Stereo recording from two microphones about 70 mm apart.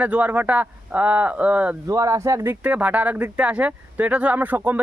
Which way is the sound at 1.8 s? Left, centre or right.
Right.